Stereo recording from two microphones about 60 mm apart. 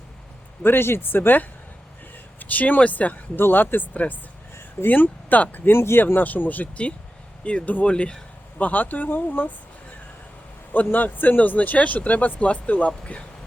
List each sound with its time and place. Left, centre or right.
0.6 s speech: left
10.7 s speech: left